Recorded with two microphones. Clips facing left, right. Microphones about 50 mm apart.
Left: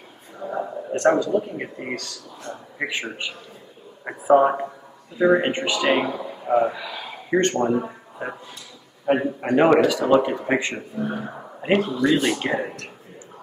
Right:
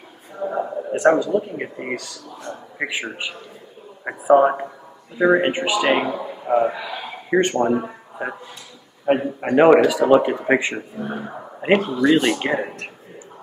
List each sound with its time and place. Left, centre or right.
0.4 s a man's voice: centre
11.6 s speech: right